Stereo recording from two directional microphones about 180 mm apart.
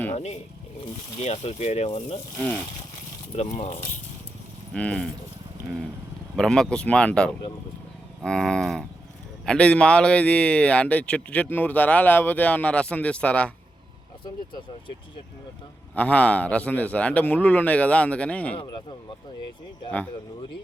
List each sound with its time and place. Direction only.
0.1 s speech: 40° left (ahead or behind)
2.4 s speech: 10° left (ahead or behind)
3.3 s speech: 40° left (ahead or behind)
4.7 s speech: 5° left (ahead or behind)
6.3 s speech: 5° left (ahead or behind)
14.3 s speech: 25° left (ahead or behind)
16.0 s speech: 10° left (ahead or behind)